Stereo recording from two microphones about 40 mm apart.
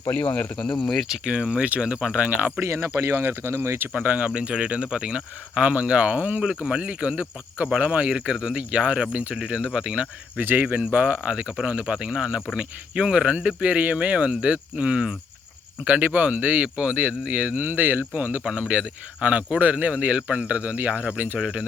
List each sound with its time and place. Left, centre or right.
0.1 s speech: left
0.5 s speech: centre
1.0 s speech: centre
1.8 s speech: right
2.6 s speech: right
3.9 s speech: right
4.4 s speech: right
10.3 s speech: right
10.9 s speech: right
17.5 s speech: right
18.5 s speech: right